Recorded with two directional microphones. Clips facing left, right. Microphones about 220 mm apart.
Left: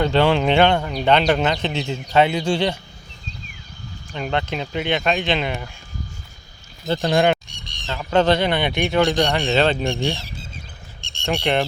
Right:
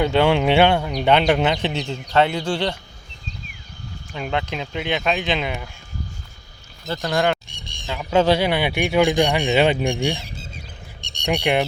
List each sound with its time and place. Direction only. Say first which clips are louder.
0.0 s speech: even; 10° right (ahead or behind)
1.7 s speech: left 1 dB; 5° left (ahead or behind)
4.1 s speech: left 1 dB; 5° right (ahead or behind)
6.8 s speech: left 3 dB; 25° left (ahead or behind)
7.5 s a sound: right 1 dB; 50° right (ahead or behind)
7.8 s speech: even; 10° right (ahead or behind)